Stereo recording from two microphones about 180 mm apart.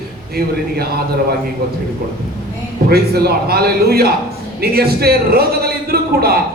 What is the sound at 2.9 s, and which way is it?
A man's voice, 60° right (ahead or behind).